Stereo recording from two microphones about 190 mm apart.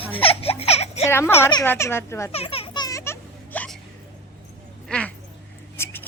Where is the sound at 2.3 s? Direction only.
30° left (ahead or behind); by 3.7 s 10° left (ahead or behind).